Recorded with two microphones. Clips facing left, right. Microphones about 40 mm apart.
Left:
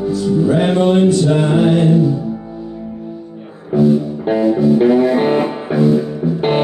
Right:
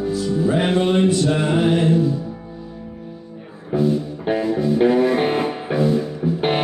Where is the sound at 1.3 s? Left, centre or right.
Centre.